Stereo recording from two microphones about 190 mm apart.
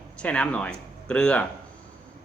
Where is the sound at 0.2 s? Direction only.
5° left (ahead or behind).